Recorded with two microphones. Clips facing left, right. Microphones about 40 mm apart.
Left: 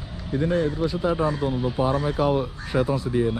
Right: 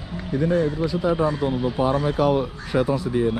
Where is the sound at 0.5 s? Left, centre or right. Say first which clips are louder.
Right 1 dB; centre.